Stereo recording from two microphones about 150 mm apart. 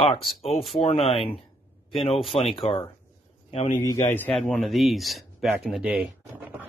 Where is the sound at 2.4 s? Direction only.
40° left (ahead or behind).